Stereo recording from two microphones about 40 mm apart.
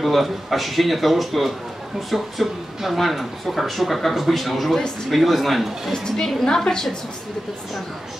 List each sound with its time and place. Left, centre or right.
0.0 s speech: centre
6.0 s a woman's voice: centre